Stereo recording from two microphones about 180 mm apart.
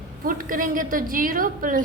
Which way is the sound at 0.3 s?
50° right (ahead or behind).